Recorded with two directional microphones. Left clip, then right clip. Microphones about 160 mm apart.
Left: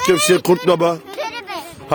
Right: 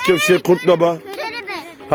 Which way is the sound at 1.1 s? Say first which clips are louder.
Even; 10° right (ahead or behind).